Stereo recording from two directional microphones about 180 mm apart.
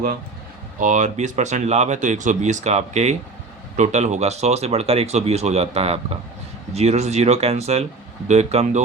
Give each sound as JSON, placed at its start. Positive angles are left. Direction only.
{"t": 0.8, "sound": "speech", "side_deg": -45}